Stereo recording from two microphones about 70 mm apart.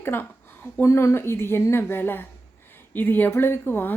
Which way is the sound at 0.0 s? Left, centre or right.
Left.